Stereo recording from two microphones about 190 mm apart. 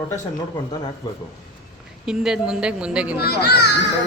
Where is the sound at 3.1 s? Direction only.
55° left (ahead or behind).